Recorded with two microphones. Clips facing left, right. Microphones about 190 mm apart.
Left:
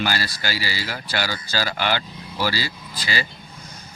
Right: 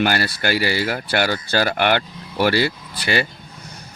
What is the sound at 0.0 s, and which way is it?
Speech, 60° right (ahead or behind).